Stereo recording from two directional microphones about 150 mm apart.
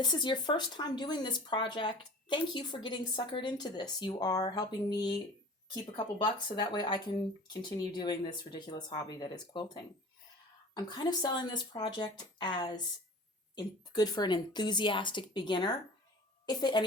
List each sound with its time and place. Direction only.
0.0 s speech: 30° left (ahead or behind)
6.2 s a woman's voice: 30° left (ahead or behind)